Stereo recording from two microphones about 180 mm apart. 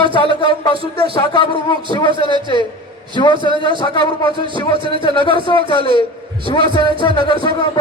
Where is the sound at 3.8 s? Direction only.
25° left (ahead or behind).